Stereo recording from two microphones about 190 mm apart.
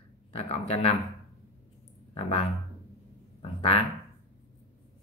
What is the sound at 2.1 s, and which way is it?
Speech, 30° left (ahead or behind).